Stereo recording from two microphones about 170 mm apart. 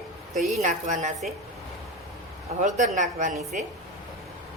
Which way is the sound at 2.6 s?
45° right (ahead or behind).